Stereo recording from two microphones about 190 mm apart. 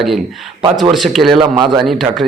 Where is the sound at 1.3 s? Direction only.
25° right (ahead or behind).